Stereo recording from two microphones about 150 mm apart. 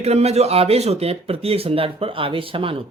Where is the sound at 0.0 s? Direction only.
45° right (ahead or behind).